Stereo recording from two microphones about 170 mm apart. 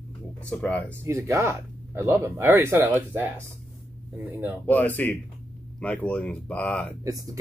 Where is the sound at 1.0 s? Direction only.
15° right (ahead or behind).